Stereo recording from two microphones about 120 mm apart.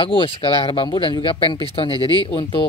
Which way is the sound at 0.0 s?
50° left (ahead or behind).